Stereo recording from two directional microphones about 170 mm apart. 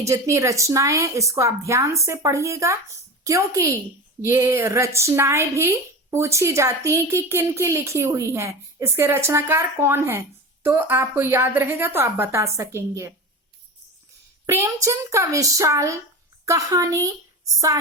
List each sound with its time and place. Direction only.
0.0 s speech: 15° right (ahead or behind)
14.4 s a woman's voice: 15° right (ahead or behind)